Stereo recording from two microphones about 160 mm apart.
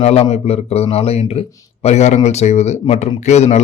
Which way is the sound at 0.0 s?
40° left (ahead or behind).